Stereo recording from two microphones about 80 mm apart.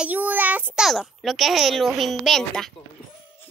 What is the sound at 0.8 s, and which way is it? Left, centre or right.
A child's voice, centre.